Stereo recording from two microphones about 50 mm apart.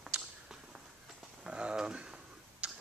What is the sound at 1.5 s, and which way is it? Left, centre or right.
Tick, centre.